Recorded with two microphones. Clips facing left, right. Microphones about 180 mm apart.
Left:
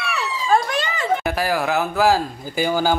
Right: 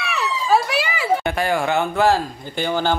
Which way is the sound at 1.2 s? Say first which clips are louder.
Right 1 dB; centre (ahead or behind).